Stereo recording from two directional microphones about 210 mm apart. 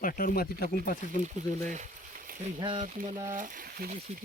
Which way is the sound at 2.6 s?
25° right (ahead or behind).